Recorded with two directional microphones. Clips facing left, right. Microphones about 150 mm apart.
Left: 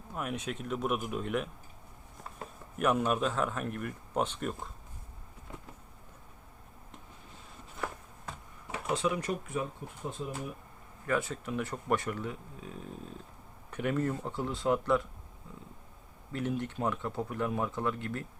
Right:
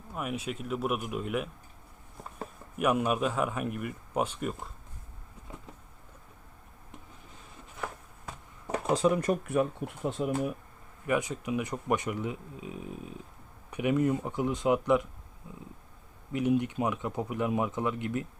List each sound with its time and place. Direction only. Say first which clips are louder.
0.1 s speech: right 2 dB; 5° right (ahead or behind)
2.7 s speech: right 1 dB; 5° right (ahead or behind)
8.6 s speech: right 6 dB; 40° right (ahead or behind); by 10.5 s 75° right (ahead or behind)
11.0 s speech: right 3 dB; 15° right (ahead or behind)
16.3 s speech: right 6 dB; 10° right (ahead or behind)